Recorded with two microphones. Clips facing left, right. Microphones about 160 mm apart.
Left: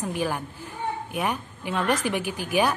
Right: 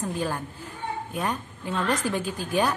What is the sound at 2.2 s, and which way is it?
Speech, 75° left (ahead or behind).